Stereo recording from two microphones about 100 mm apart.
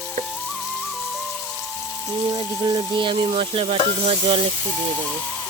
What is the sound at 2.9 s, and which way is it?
Sizzle, 55° right (ahead or behind).